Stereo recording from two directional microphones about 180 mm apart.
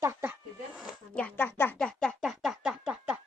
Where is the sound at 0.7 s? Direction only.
5° right (ahead or behind).